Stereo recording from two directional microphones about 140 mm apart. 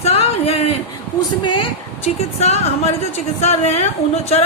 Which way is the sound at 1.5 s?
35° left (ahead or behind).